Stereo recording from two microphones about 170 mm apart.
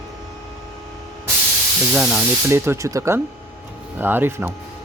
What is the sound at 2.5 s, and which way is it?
Speech, 15° right (ahead or behind).